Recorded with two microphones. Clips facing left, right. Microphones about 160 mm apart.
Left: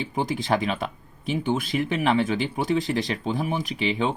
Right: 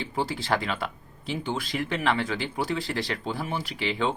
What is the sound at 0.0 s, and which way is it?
Speech, 15° left (ahead or behind).